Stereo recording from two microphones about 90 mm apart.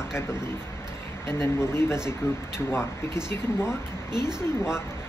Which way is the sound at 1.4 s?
30° left (ahead or behind).